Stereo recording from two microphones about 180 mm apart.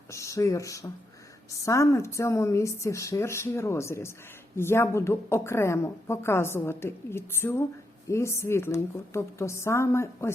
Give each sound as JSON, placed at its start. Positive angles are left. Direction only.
{"t": 0.1, "sound": "a woman's voice", "side_deg": 15}